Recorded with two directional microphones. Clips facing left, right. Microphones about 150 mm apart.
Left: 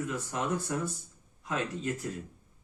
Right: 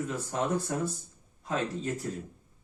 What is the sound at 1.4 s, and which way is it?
Speech, 35° right (ahead or behind).